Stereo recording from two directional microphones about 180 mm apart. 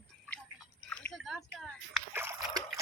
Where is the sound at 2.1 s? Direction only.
10° right (ahead or behind).